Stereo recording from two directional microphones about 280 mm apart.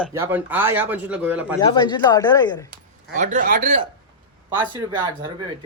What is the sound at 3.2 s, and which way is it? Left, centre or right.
Speech, right.